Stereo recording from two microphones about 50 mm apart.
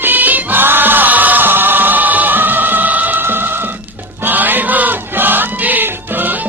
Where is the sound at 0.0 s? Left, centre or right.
Right.